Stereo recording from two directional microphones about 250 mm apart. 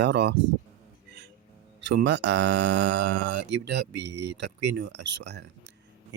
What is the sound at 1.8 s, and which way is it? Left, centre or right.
Speech, right.